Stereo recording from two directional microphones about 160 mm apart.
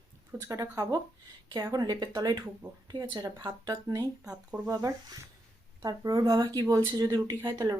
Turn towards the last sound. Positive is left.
turn(degrees=-25)  # may be behind; listen again after turning